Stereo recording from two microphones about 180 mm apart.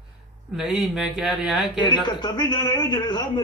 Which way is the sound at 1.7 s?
25° left (ahead or behind).